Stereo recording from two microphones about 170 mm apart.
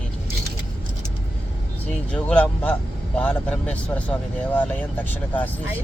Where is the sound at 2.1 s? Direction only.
10° left (ahead or behind).